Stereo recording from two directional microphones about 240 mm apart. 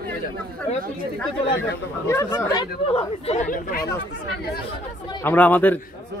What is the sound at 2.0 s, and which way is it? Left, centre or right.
Speech, centre.